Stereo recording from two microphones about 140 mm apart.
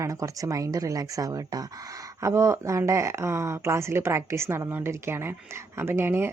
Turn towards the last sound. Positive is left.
turn(degrees=-15)  # may be behind; listen again after turning